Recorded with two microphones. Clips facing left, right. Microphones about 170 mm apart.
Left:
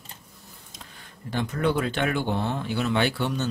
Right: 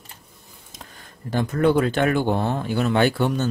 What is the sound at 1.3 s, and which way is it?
Speech, 45° right (ahead or behind).